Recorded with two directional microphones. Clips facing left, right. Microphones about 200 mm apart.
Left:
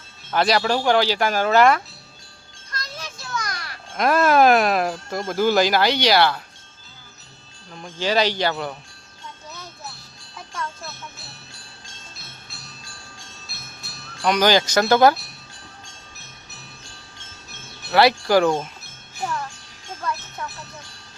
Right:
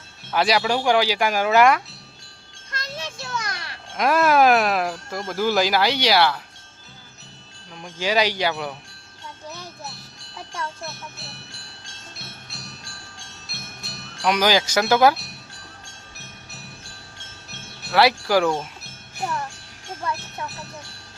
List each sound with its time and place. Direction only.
0.3 s speech: 10° right (ahead or behind)
2.7 s children playing: 25° right (ahead or behind)
3.9 s speech: 10° right (ahead or behind)
7.7 s speech: 10° right (ahead or behind)
12.2 s music: 70° right (ahead or behind)
14.3 s speech: 5° right (ahead or behind)
17.9 s speech: centre (ahead or behind)